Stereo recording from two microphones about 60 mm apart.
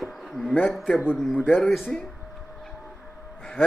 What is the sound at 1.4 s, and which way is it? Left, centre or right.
Speech, left.